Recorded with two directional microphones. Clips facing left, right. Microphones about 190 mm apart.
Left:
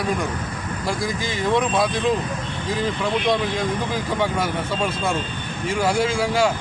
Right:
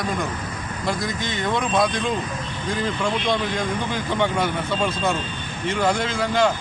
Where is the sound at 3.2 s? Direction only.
5° left (ahead or behind).